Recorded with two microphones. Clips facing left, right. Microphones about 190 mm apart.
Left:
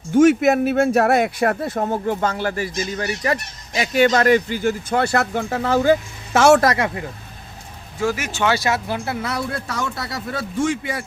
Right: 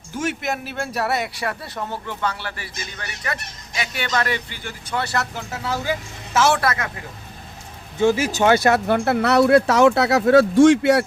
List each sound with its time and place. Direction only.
0.1 s speech: 50° left (ahead or behind)
7.9 s speech: 25° right (ahead or behind)
8.5 s speech: 55° right (ahead or behind); by 11.0 s 75° right (ahead or behind)